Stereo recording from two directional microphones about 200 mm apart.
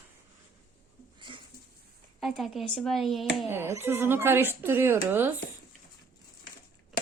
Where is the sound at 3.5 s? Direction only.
10° right (ahead or behind).